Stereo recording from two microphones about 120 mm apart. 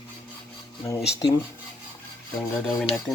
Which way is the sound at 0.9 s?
25° left (ahead or behind).